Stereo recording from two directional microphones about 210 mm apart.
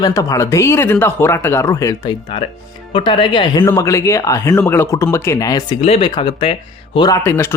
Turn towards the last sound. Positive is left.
turn(degrees=10)  # may be behind; listen again after turning